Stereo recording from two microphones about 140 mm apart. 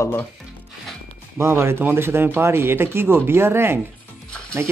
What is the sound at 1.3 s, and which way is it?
Speech, 20° right (ahead or behind).